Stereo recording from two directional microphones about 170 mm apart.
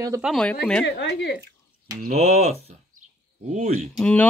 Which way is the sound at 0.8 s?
85° left.